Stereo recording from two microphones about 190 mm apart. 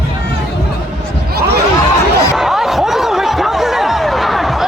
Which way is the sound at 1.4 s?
55° right (ahead or behind).